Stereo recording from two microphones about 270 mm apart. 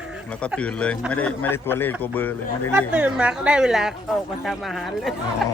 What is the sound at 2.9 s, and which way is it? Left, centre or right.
A man's voice, centre.